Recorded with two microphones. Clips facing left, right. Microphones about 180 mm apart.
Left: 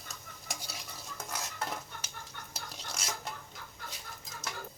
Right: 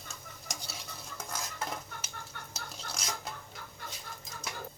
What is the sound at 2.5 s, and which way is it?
Cutlery, centre (ahead or behind).